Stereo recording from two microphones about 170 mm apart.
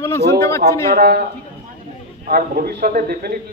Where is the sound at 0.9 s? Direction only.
65° right (ahead or behind).